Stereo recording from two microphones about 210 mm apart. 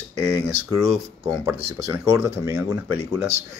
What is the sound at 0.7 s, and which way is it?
Speech, 15° right (ahead or behind).